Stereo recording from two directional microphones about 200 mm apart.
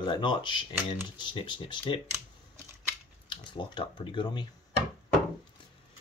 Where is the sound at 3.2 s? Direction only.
25° left (ahead or behind).